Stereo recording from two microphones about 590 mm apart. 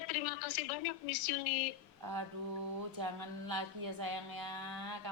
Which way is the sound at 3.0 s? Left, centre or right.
Right.